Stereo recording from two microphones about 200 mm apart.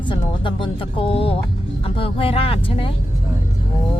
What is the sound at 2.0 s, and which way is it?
Speech, 30° left (ahead or behind).